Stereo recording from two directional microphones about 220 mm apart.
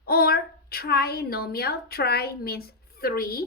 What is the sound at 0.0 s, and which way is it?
A woman's voice, 45° left (ahead or behind).